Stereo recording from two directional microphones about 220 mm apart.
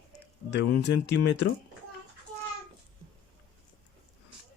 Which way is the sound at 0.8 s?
50° left (ahead or behind).